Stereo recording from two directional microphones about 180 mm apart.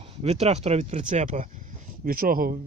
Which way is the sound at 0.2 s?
35° right (ahead or behind).